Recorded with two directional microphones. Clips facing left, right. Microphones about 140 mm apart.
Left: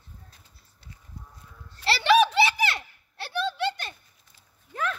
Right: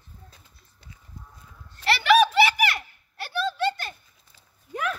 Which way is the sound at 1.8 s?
30° left (ahead or behind).